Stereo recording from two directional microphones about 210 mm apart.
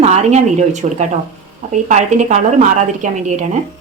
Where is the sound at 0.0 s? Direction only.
30° right (ahead or behind).